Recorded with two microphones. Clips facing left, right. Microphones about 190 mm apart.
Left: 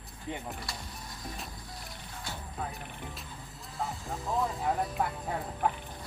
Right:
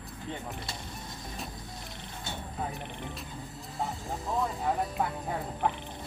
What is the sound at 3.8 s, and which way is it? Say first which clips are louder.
Music: right 1 dB; centre (ahead or behind).